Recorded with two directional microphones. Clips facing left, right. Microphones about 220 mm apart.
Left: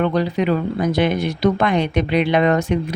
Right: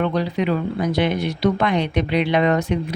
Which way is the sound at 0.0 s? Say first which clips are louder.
Left 2 dB; 45° left (ahead or behind).